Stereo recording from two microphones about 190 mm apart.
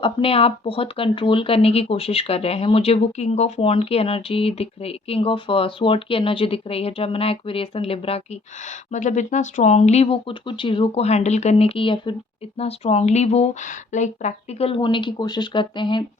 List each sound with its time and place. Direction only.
0.0 s speech: 30° left (ahead or behind)